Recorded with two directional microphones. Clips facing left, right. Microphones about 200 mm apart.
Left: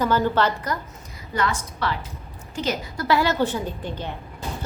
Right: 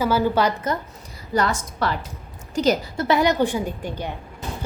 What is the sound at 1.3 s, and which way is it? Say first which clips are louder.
A woman's voice: right 3 dB; 40° right (ahead or behind).